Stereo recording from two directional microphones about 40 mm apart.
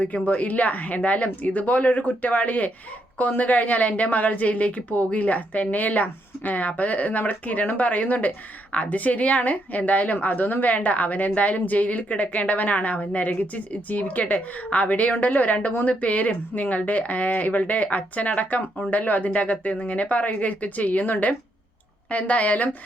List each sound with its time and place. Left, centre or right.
0.0 s a woman's voice: left